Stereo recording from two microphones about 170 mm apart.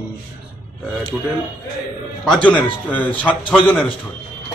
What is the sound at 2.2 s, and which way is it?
Speech, 5° left (ahead or behind).